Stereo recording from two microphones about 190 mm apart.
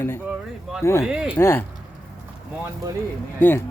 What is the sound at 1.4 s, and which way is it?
Speech, 10° left (ahead or behind).